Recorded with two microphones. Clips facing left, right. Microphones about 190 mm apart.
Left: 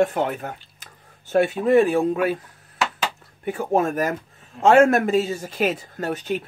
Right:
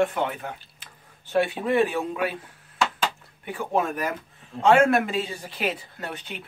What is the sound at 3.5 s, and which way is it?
Speech, 45° left (ahead or behind).